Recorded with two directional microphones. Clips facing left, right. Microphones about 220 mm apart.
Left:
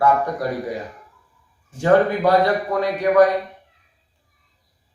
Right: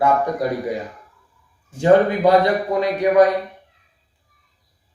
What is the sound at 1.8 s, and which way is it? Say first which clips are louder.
A man's voice: right 2 dB; 20° right (ahead or behind).